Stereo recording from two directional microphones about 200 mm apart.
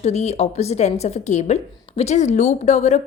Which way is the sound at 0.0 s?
30° left (ahead or behind).